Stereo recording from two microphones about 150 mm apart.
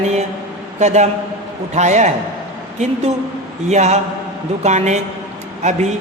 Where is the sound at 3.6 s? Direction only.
50° right (ahead or behind).